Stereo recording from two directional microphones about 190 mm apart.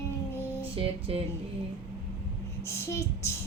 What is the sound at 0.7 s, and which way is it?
Music, 30° right (ahead or behind).